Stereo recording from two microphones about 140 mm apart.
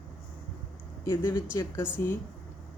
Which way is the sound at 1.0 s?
20° left (ahead or behind).